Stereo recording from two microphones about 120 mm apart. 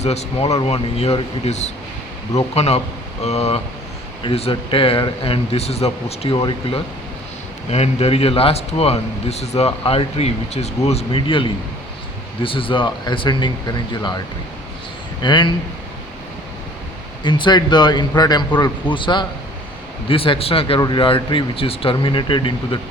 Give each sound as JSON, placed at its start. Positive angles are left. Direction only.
{"t": 0.0, "sound": "speech", "side_deg": 65}
{"t": 6.3, "sound": "a man's voice", "side_deg": 40}
{"t": 7.7, "sound": "speech", "side_deg": 60}
{"t": 11.3, "sound": "a man's voice", "side_deg": 45}
{"t": 15.2, "sound": "a man's voice", "side_deg": 40}
{"t": 17.2, "sound": "a man's voice", "side_deg": 40}